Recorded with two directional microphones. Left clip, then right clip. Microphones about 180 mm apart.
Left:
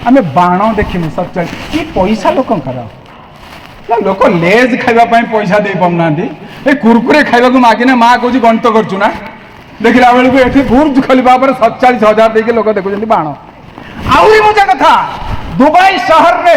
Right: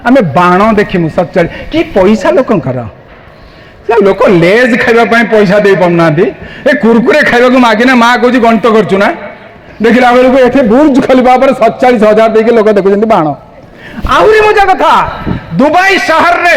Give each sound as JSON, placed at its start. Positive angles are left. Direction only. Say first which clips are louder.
{"t": 0.0, "sound": "a man's voice", "louder": "right 2 dB", "side_deg": -55}
{"t": 3.8, "sound": "a man's voice", "louder": "right 3 dB", "side_deg": -55}
{"t": 10.3, "sound": "a man's voice", "louder": "right 3 dB", "side_deg": -55}